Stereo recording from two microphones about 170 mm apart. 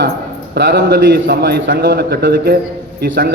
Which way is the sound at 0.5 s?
80° right.